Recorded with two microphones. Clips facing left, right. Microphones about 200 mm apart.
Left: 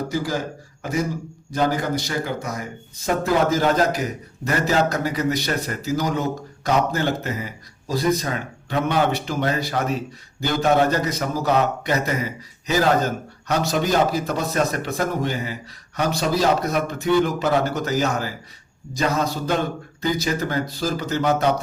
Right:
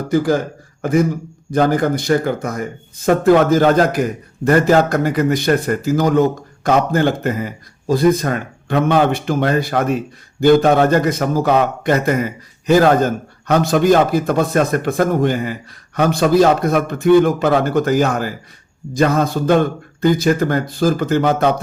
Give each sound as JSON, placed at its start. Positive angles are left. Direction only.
{"t": 0.1, "sound": "speech", "side_deg": -55}